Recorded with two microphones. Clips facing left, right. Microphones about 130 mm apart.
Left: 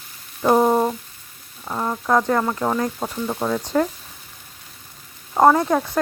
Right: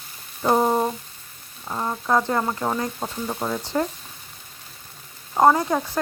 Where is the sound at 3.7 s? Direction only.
5° right (ahead or behind).